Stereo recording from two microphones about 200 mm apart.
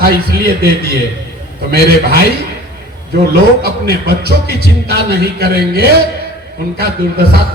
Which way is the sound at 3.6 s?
50° right (ahead or behind).